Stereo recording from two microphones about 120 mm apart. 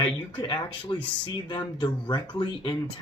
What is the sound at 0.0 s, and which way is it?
Speech, 40° left (ahead or behind).